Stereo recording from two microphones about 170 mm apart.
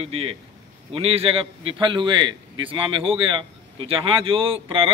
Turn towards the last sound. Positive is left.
turn(degrees=-30)  # may be behind; listen again after turning